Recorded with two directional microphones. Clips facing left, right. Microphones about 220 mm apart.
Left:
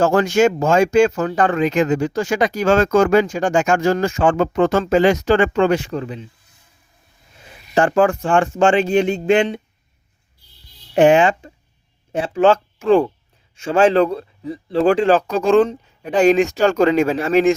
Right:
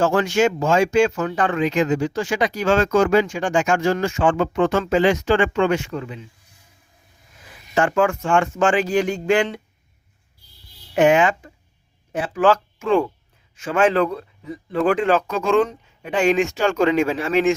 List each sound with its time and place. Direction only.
0.0 s speech: 40° left (ahead or behind)
7.4 s speech: 35° left (ahead or behind)
10.9 s speech: 30° left (ahead or behind)